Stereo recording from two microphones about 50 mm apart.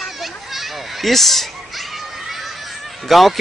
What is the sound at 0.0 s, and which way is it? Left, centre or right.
Children playing, centre.